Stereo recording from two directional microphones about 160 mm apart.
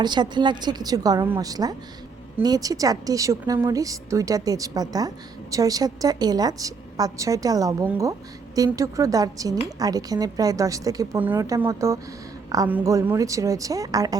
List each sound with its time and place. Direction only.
0.0 s a woman's voice: 30° right (ahead or behind)